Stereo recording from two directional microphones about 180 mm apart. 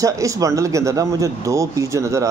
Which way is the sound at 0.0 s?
15° right (ahead or behind).